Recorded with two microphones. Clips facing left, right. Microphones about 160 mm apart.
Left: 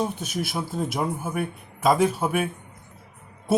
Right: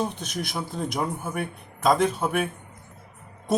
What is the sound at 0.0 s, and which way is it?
A man's voice, 10° left (ahead or behind).